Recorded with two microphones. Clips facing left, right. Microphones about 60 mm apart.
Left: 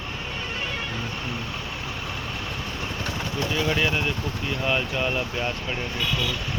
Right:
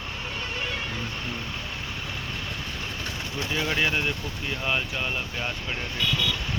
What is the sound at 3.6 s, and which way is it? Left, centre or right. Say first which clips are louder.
Speech: even; centre.